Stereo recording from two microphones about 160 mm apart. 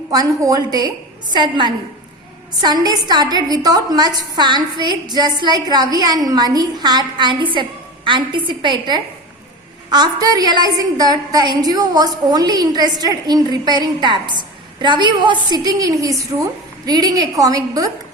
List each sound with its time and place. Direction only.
0.1 s a woman's voice: 20° right (ahead or behind)